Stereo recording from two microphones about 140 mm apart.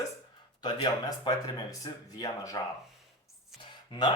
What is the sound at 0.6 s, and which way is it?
Speech, 30° left (ahead or behind).